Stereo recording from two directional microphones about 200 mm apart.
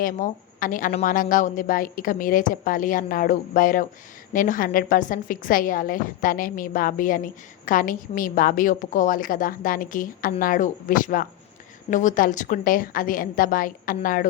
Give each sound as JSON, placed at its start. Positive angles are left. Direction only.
{"t": 0.0, "sound": "a woman's voice", "side_deg": 40}